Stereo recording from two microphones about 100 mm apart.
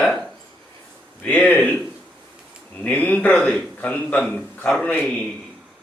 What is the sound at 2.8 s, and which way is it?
A man's voice, 15° left (ahead or behind).